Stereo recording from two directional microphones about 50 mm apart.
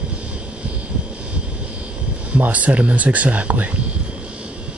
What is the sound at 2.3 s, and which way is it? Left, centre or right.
Speech, right.